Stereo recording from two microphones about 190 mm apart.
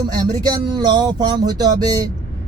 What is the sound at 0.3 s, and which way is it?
Speech, 25° right (ahead or behind).